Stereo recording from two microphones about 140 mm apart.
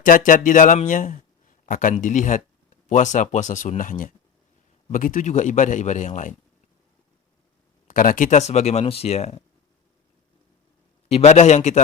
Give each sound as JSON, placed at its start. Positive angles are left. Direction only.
{"t": 0.0, "sound": "a sound", "side_deg": 75}
{"t": 1.6, "sound": "a man's voice", "side_deg": 70}
{"t": 7.9, "sound": "speech", "side_deg": 75}
{"t": 11.1, "sound": "speech", "side_deg": 55}